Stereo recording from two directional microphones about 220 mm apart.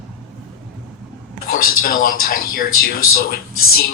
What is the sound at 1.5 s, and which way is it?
Speech, 40° left (ahead or behind).